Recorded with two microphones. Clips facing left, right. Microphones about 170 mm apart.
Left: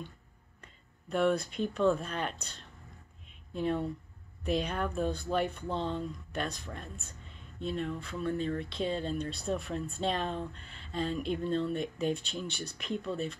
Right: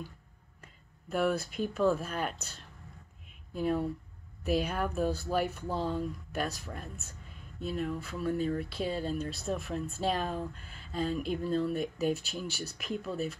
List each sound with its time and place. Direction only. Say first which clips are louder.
0.6 s speech: right 1 dB; 5° right (ahead or behind)